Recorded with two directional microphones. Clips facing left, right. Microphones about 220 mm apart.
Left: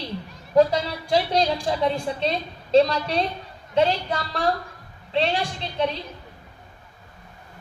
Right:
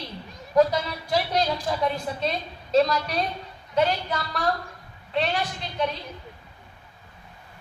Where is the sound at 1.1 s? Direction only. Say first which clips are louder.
Left 3 dB; 30° left (ahead or behind).